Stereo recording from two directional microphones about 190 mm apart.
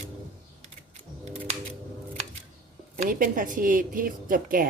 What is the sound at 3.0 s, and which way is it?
A woman's voice, 45° right (ahead or behind).